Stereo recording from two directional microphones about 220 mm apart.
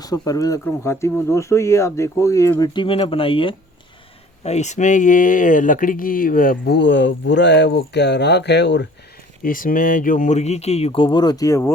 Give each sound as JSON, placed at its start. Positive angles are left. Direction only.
{"t": 0.0, "sound": "speech", "side_deg": 15}
{"t": 9.4, "sound": "speech", "side_deg": 40}